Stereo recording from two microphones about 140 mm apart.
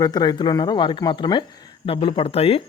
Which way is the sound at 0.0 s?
30° left (ahead or behind).